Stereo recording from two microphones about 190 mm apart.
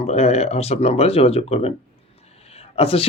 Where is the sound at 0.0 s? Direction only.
35° left (ahead or behind).